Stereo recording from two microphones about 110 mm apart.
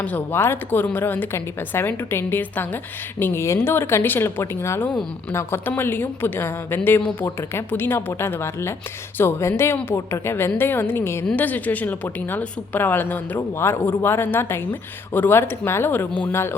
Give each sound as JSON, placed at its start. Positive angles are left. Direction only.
{"t": 0.0, "sound": "a woman's voice", "side_deg": 15}